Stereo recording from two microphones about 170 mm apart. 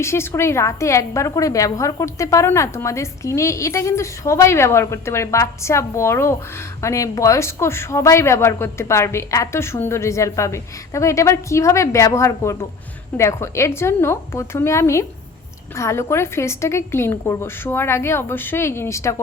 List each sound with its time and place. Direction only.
0.0 s a woman's voice: 15° left (ahead or behind)